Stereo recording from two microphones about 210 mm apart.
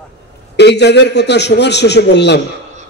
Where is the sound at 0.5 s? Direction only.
55° left (ahead or behind).